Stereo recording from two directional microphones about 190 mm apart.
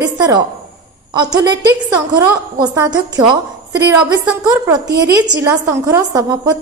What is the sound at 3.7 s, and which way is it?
Speech, 10° right (ahead or behind).